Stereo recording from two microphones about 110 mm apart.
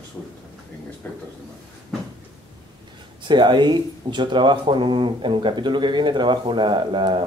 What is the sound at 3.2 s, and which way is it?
Speech, 45° right (ahead or behind).